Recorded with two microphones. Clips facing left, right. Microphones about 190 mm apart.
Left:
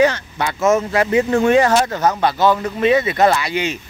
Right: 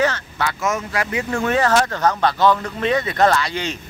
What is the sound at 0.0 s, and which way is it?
Speech, 15° left (ahead or behind).